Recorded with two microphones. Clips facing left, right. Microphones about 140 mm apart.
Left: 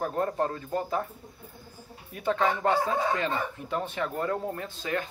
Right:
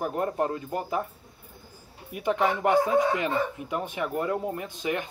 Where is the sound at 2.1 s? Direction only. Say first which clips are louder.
Right 1 dB; 15° right (ahead or behind).